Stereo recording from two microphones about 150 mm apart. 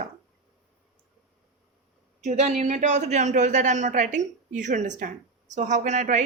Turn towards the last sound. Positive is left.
turn(degrees=-50)  # may be behind; listen again after turning